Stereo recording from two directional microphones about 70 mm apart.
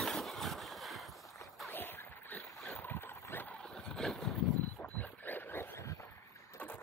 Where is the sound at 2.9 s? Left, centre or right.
Left.